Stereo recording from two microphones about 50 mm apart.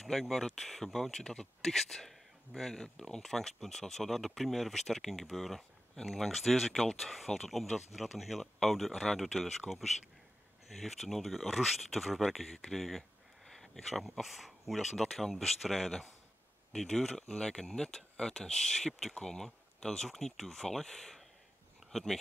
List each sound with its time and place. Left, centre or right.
0.0 s speech: centre